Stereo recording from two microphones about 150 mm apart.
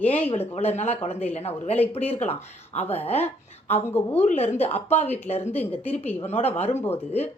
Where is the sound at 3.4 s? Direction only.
45° left (ahead or behind).